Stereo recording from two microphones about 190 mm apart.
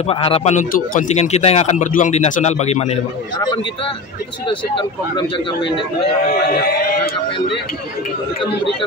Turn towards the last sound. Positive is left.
turn(degrees=50)  # may be behind; listen again after turning